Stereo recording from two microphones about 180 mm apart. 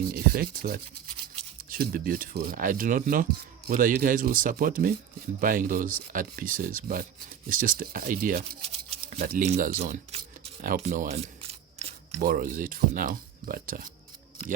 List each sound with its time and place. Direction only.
0.1 s speech: 55° right (ahead or behind)
8.4 s a sound: 35° right (ahead or behind)
9.2 s speech: 45° right (ahead or behind)
9.8 s speech: 35° right (ahead or behind)
11.4 s a sound: 35° right (ahead or behind)
12.2 s speech: 50° right (ahead or behind)